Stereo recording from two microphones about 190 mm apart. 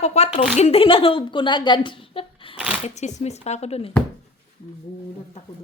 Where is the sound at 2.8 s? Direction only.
35° left (ahead or behind).